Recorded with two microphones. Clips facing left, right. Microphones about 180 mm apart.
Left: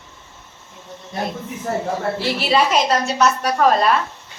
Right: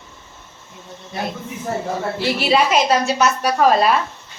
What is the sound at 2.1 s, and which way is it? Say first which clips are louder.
A woman's voice: right 2 dB; centre (ahead or behind).